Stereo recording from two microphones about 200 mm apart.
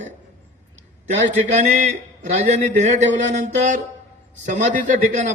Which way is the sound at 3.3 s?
40° right (ahead or behind).